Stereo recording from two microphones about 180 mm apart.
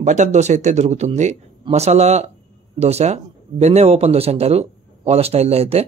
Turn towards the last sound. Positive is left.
turn(degrees=-35)  # may be behind; listen again after turning